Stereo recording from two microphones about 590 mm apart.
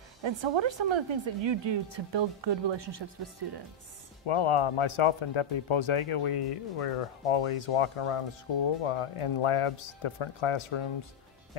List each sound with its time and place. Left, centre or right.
0.2 s speech: right
4.3 s speech: left